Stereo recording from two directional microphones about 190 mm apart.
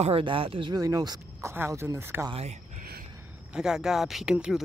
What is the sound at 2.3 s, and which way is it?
Speech, 35° right (ahead or behind).